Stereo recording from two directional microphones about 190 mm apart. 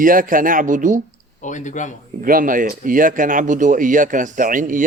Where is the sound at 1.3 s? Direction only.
40° left (ahead or behind).